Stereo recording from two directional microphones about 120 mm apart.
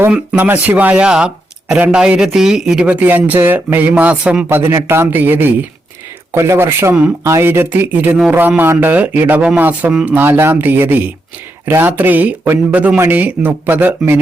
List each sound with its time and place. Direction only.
0.1 s speech: 10° right (ahead or behind)